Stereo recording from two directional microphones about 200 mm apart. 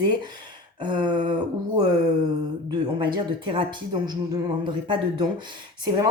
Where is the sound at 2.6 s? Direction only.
25° right (ahead or behind).